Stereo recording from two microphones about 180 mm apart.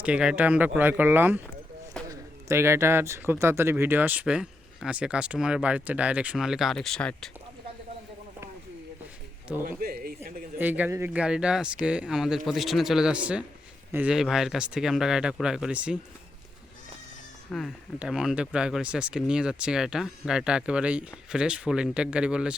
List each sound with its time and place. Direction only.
0.0 s speech: 5° right (ahead or behind)
9.6 s speech: 55° right (ahead or behind)
10.6 s speech: 10° right (ahead or behind)
17.5 s speech: centre (ahead or behind)